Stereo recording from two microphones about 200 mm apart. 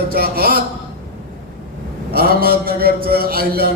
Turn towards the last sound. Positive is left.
turn(degrees=-50)  # may be behind; listen again after turning